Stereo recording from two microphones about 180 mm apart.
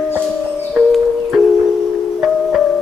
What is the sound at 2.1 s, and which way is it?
Music, centre (ahead or behind).